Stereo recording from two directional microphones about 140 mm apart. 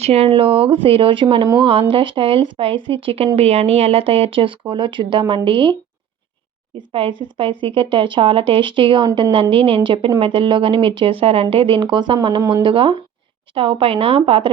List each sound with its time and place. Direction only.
0.0 s speech: 45° right (ahead or behind)
6.9 s speech: 40° right (ahead or behind)